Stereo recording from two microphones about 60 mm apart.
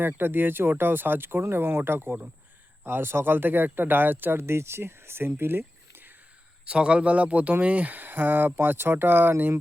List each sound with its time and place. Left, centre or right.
0.1 s speech: right
6.7 s speech: centre; by 9.3 s right